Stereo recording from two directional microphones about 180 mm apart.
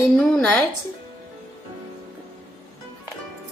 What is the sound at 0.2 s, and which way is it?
Speech, 10° left (ahead or behind).